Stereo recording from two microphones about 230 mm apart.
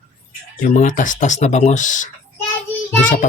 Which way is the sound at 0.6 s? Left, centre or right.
Left.